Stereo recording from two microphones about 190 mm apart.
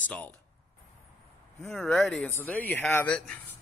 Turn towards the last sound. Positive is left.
turn(degrees=5)  # may be behind; listen again after turning